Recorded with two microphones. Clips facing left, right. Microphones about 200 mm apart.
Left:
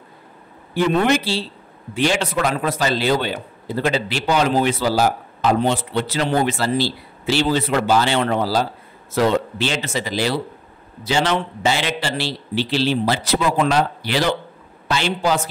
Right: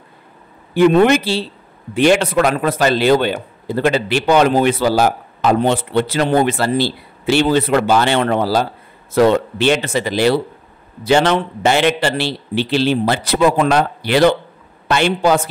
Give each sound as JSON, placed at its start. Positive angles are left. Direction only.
{"t": 0.7, "sound": "a man's voice", "side_deg": -60}